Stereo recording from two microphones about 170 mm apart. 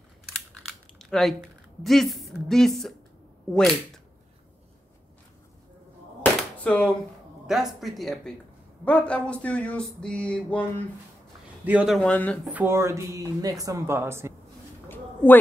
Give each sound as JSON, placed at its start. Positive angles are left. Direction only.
{"t": 0.6, "sound": "typing", "side_deg": 0}
{"t": 1.8, "sound": "speech", "side_deg": 0}
{"t": 6.6, "sound": "speech", "side_deg": 10}
{"t": 7.4, "sound": "speech", "side_deg": 0}
{"t": 8.8, "sound": "a sound", "side_deg": 10}
{"t": 11.6, "sound": "speech", "side_deg": -5}
{"t": 12.5, "sound": "speech", "side_deg": -15}